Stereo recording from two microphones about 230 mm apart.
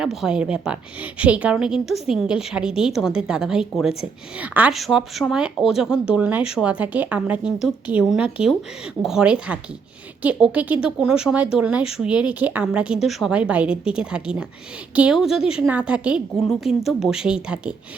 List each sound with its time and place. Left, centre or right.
0.0 s speech: centre